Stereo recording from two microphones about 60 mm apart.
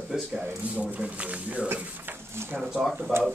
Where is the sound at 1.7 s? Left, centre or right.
Right.